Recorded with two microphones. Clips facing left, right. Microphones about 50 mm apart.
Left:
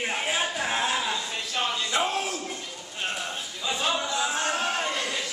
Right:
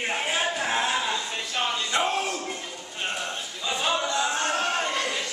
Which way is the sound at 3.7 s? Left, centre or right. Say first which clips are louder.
Right 2 dB; centre.